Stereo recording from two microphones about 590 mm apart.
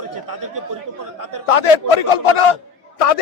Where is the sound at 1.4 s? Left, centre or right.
Left.